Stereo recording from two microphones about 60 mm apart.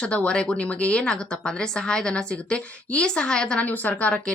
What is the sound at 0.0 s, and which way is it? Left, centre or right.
Speech, centre.